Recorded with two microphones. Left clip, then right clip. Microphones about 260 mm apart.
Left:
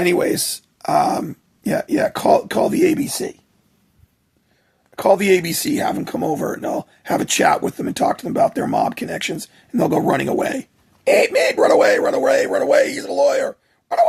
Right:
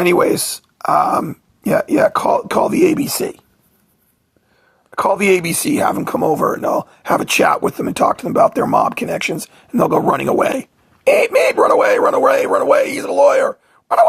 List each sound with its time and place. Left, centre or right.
0.0 s speech: centre
4.9 s speech: centre